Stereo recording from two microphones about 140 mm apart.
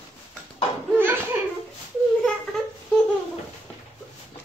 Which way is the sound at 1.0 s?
15° right (ahead or behind).